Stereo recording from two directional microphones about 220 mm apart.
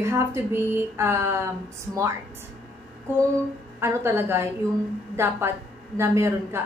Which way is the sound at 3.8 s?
10° right (ahead or behind).